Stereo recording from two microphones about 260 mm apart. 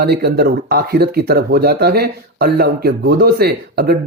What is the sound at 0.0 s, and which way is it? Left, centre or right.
Speech, right.